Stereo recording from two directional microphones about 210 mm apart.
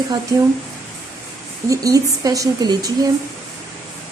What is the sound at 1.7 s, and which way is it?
Speech, 15° right (ahead or behind).